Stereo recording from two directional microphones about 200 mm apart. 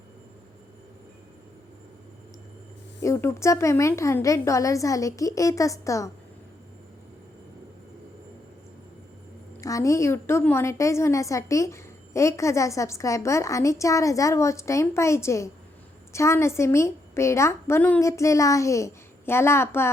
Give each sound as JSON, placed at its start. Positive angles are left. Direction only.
{"t": 3.0, "sound": "a woman's voice", "side_deg": 15}
{"t": 9.6, "sound": "a woman's voice", "side_deg": 15}